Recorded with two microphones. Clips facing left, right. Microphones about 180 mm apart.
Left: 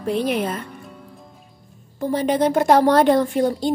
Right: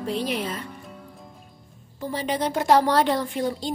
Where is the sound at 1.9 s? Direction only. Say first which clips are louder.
Left 7 dB; 50° left (ahead or behind).